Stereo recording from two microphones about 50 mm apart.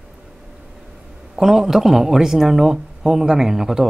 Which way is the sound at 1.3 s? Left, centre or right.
Centre.